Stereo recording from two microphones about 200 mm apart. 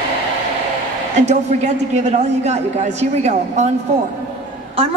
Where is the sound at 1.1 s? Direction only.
35° right (ahead or behind).